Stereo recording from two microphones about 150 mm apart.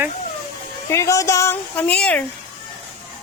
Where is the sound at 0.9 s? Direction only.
20° left (ahead or behind).